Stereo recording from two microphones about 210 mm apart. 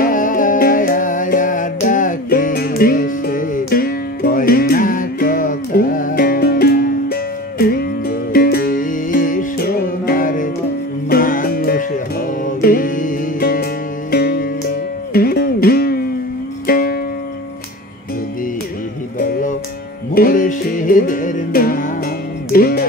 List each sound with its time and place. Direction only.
0.0 s music: 40° left (ahead or behind)
20.2 s music: 40° left (ahead or behind)